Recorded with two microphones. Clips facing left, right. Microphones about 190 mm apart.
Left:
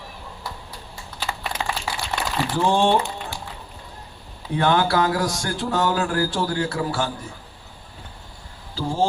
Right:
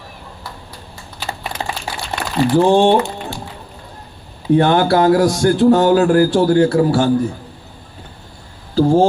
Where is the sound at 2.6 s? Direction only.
30° right (ahead or behind).